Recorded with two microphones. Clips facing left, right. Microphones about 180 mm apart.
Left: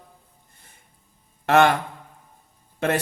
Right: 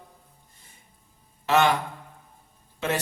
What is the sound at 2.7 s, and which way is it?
Speech, 55° left (ahead or behind).